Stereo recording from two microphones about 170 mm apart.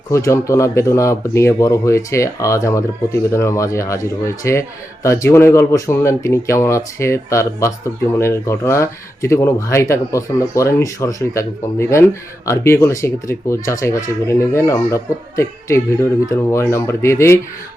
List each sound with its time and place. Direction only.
0.1 s speech: 15° left (ahead or behind)